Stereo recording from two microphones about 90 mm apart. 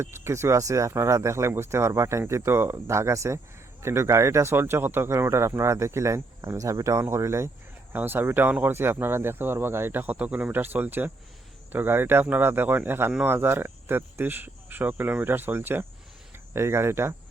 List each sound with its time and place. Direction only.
0.0 s speech: 30° right (ahead or behind)